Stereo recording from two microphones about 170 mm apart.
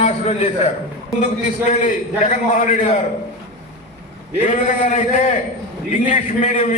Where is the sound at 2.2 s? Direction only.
45° left (ahead or behind).